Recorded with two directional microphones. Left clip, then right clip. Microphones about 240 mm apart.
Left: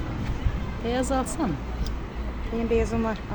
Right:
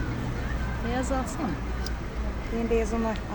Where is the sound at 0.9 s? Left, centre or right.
Left.